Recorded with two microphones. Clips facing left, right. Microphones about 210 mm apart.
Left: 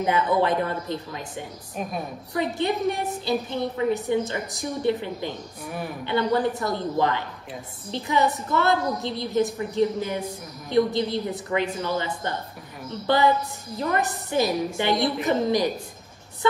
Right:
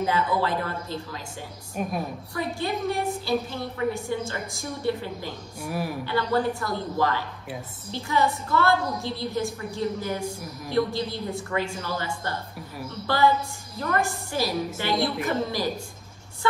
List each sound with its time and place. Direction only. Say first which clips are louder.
0.0 s a woman's voice: left 3 dB; 20° left (ahead or behind)
1.8 s a woman's voice: right 2 dB; centre (ahead or behind)
2.3 s a woman's voice: left 4 dB; 20° left (ahead or behind)
5.6 s a woman's voice: right 5 dB; 5° right (ahead or behind)
6.0 s a woman's voice: left 3 dB; 20° left (ahead or behind)